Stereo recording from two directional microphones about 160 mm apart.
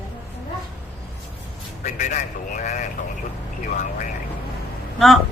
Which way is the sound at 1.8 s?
50° left (ahead or behind).